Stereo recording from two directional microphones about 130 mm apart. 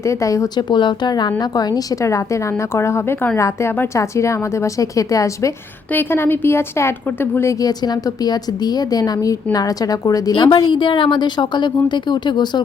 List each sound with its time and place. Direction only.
0.0 s a woman's voice: 25° left (ahead or behind)
7.6 s a woman's voice: 30° left (ahead or behind)